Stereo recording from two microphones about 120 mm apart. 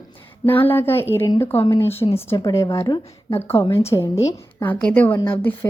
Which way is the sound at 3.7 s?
20° left (ahead or behind).